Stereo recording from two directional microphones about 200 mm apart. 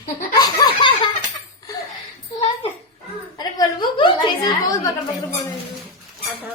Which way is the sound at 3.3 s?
20° left (ahead or behind).